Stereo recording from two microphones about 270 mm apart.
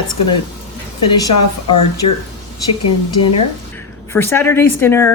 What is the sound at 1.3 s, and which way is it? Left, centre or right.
Speech, left.